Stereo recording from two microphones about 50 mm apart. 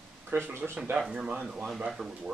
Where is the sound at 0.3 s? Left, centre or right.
Right.